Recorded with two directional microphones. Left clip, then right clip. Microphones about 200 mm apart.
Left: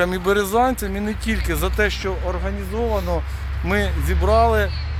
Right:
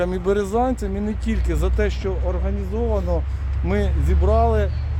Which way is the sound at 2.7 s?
25° left (ahead or behind).